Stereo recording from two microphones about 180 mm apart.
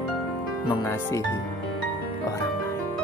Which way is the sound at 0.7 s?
15° left (ahead or behind).